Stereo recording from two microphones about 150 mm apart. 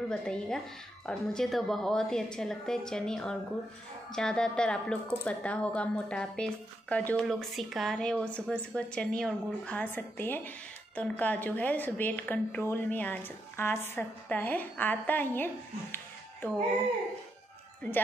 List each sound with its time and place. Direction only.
0.1 s a woman's voice: 5° left (ahead or behind)